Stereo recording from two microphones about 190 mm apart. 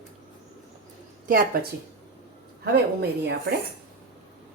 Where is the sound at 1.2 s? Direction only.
50° right (ahead or behind).